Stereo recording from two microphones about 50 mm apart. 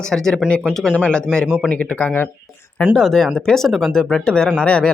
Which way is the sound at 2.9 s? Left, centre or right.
Centre.